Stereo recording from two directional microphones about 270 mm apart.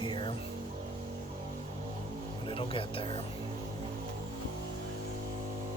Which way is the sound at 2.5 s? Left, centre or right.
Centre.